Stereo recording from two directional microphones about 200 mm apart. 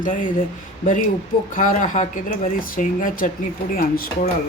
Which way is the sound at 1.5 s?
40° left (ahead or behind).